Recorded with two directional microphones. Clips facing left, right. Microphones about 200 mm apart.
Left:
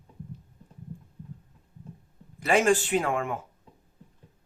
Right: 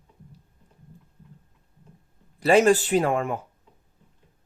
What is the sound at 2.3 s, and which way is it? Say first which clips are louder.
Speech: right 5 dB; 35° right (ahead or behind).